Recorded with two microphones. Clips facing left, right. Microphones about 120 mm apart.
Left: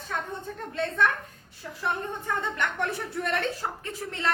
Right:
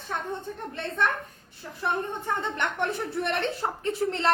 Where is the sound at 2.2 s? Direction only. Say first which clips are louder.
Left 2 dB; 25° right (ahead or behind).